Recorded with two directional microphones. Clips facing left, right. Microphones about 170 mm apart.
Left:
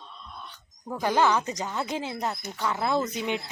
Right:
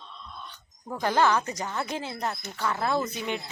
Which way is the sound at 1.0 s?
15° left (ahead or behind).